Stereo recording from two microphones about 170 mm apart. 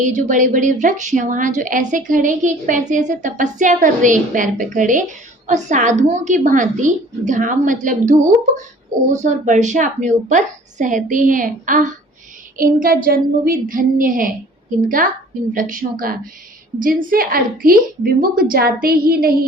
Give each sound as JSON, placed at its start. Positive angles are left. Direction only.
{"t": 0.0, "sound": "a woman's voice", "side_deg": -50}